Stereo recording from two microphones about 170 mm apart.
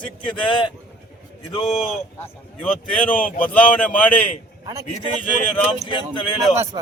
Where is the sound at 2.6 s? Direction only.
5° left (ahead or behind).